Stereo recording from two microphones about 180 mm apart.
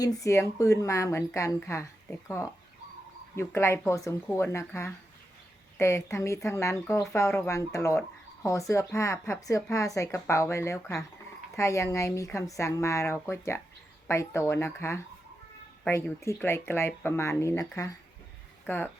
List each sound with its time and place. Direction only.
0.2 s speech: 15° left (ahead or behind)